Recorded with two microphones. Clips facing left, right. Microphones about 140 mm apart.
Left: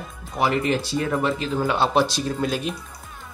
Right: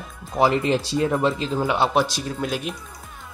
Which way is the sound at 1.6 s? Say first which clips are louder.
Even; 15° right (ahead or behind).